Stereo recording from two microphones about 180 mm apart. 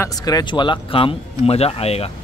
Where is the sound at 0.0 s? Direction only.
20° left (ahead or behind).